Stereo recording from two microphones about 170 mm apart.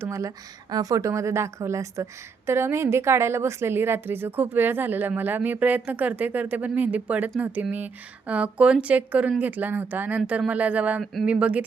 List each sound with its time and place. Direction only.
0.0 s a woman's voice: 20° right (ahead or behind)